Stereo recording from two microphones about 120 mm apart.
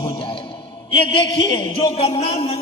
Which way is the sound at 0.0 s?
45° left (ahead or behind).